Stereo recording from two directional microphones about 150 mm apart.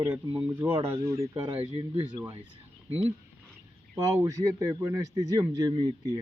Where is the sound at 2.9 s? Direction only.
45° right (ahead or behind).